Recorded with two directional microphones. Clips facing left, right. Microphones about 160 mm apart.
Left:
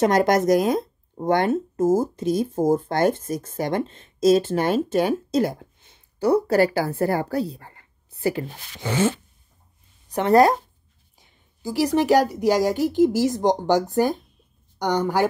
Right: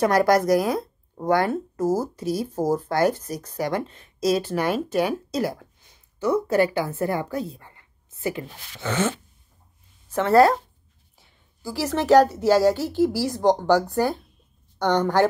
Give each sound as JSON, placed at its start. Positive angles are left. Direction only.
{"t": 0.0, "sound": "a woman's voice", "side_deg": 20}
{"t": 8.8, "sound": "a woman's voice", "side_deg": 10}